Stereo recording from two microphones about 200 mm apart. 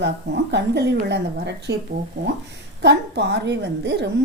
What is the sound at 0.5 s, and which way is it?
A woman's voice, 55° right (ahead or behind).